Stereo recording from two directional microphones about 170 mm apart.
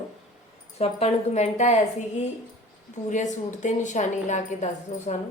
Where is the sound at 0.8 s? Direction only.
35° left (ahead or behind).